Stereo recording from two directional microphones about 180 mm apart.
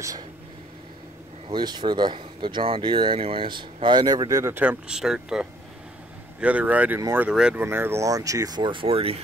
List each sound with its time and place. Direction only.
1.5 s speech: 25° right (ahead or behind)